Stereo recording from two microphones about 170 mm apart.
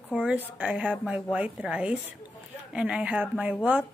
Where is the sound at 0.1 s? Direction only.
5° right (ahead or behind).